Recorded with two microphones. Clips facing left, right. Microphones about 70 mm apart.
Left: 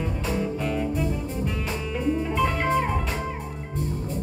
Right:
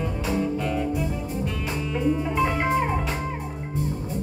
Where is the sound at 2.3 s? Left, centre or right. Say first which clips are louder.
Even; centre.